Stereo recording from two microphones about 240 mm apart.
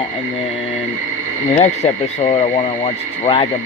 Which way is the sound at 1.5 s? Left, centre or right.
Left.